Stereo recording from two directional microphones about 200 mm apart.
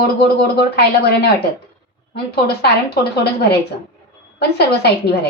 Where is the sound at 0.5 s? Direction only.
55° left (ahead or behind).